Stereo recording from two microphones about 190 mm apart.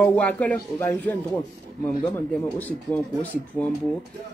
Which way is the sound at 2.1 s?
10° left (ahead or behind).